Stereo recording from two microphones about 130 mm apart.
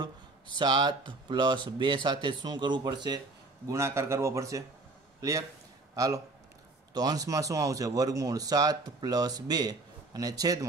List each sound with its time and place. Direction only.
0.6 s speech: 35° right (ahead or behind)
3.6 s speech: 20° right (ahead or behind)
5.9 s a man's voice: 25° right (ahead or behind)